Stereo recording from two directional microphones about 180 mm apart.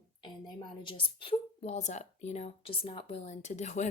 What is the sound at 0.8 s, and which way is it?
A woman's voice, 30° left (ahead or behind).